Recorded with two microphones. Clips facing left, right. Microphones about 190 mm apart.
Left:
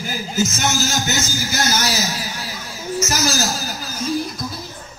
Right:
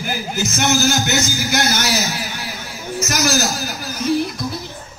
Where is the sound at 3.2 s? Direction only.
65° right (ahead or behind).